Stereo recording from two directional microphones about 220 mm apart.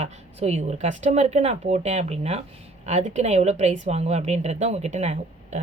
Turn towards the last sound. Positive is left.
turn(degrees=-30)  # may be behind; listen again after turning